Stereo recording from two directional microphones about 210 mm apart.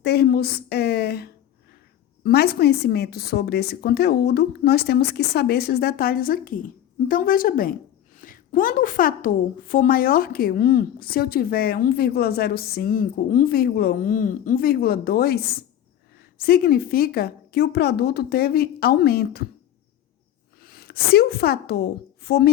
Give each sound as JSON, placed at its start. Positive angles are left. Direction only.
{"t": 0.0, "sound": "a sound", "side_deg": 50}
{"t": 2.2, "sound": "a woman's voice", "side_deg": 50}
{"t": 20.6, "sound": "speech", "side_deg": 45}